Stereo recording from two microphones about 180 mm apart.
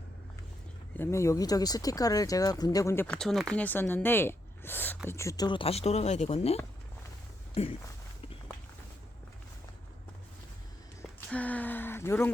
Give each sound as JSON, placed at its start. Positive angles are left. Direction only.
{"t": 0.9, "sound": "speech", "side_deg": 15}
{"t": 11.3, "sound": "speech", "side_deg": 10}